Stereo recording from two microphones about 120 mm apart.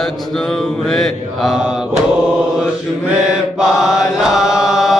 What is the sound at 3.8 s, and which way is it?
Chant, 5° right (ahead or behind).